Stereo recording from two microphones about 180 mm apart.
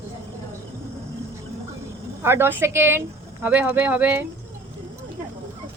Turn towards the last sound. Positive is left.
turn(degrees=-10)  # may be behind; listen again after turning